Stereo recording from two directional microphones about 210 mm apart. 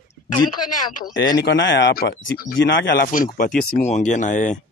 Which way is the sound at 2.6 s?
60° left (ahead or behind).